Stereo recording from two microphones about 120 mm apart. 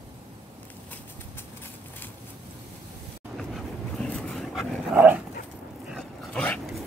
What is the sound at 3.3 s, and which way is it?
Vehicle, 5° left (ahead or behind).